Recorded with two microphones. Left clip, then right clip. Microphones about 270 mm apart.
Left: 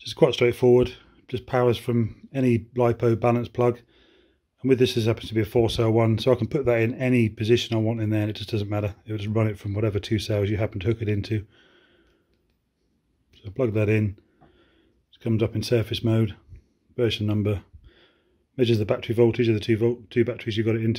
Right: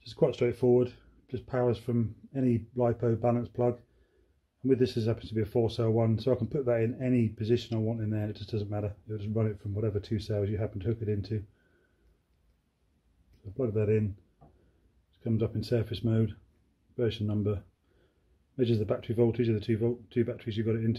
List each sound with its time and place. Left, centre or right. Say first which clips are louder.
0.0 s speech: left 8 dB; left
13.4 s speech: left 6 dB; left
15.0 s speech: left 7 dB; left